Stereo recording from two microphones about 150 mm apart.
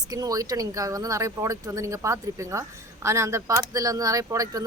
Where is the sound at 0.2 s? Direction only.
25° right (ahead or behind).